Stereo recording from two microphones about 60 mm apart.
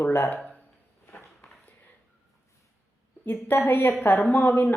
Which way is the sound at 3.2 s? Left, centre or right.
Left.